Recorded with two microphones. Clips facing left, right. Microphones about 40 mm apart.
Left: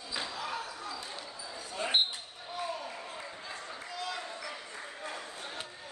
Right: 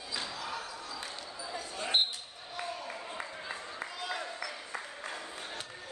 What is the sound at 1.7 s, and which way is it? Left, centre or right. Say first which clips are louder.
Basketball bounce: left 1 dB; centre.